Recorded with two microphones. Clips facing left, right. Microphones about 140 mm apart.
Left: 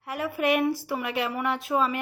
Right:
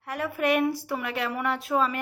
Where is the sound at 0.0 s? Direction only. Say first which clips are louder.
Even; 5° left (ahead or behind).